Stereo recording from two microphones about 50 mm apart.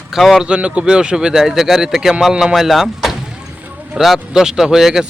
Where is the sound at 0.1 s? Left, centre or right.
Centre.